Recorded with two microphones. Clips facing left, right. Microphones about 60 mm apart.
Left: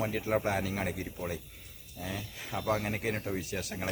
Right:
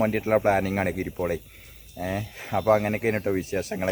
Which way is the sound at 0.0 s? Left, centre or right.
Right.